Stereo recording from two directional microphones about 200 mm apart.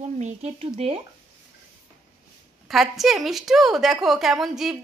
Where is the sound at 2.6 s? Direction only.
Centre (ahead or behind).